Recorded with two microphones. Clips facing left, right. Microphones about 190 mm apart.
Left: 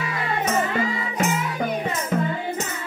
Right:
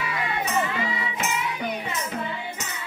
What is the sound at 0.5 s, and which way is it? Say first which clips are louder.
Music: left 5 dB; 45° left (ahead or behind).